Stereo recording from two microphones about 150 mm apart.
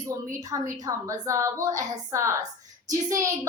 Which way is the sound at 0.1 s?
20° right (ahead or behind).